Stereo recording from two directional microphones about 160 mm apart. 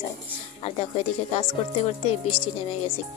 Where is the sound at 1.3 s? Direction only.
40° left (ahead or behind).